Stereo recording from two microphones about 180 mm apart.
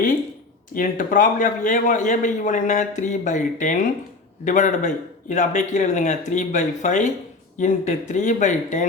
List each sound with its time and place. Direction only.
0.7 s a man's voice: 50° left (ahead or behind)